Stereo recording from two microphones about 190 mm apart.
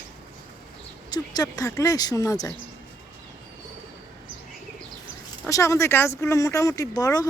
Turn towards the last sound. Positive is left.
turn(degrees=20)  # may be behind; listen again after turning